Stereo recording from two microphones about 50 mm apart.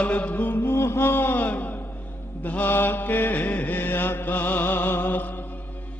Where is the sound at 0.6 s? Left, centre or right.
Left.